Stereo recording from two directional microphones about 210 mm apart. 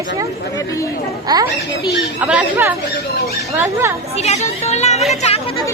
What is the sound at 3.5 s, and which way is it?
Speech, 10° right (ahead or behind).